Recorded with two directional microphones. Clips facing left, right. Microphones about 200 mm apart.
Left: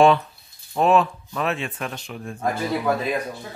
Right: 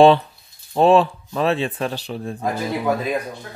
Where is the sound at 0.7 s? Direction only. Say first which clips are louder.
Right 4 dB; 30° right (ahead or behind).